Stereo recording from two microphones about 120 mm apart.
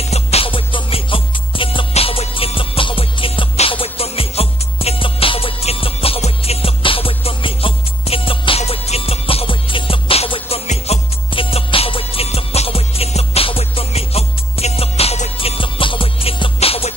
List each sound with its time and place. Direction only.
0.1 s music: 55° left (ahead or behind)